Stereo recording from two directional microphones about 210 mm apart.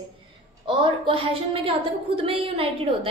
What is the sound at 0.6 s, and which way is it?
A woman's voice, 25° right (ahead or behind).